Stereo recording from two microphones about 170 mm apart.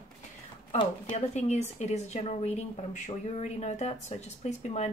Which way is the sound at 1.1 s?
40° left (ahead or behind).